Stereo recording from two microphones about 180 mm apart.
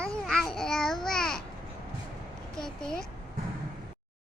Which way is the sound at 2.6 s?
5° left (ahead or behind).